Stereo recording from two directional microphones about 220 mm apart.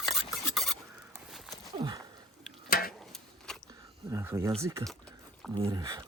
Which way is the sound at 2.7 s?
40° left (ahead or behind).